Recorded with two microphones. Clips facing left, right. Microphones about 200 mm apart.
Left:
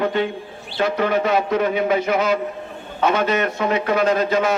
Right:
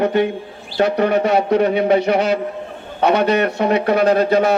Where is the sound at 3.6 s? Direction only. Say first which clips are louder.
Right 4 dB; 35° right (ahead or behind).